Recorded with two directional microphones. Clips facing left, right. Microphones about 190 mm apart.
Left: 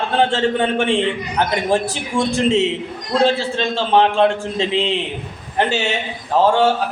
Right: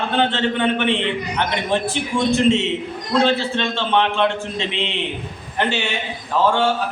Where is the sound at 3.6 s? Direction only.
35° left (ahead or behind).